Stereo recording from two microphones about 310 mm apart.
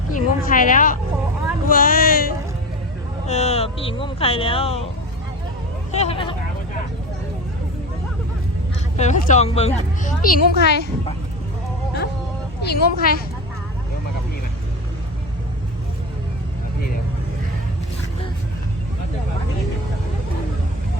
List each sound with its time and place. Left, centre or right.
0.1 s a woman's voice: left
5.9 s a woman's voice: centre
9.0 s a woman's voice: left
12.6 s a woman's voice: left